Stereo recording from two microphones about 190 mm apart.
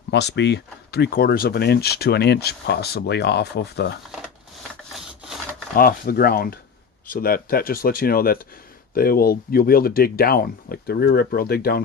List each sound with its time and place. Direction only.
0.1 s speech: 65° left (ahead or behind)
5.7 s speech: 50° left (ahead or behind)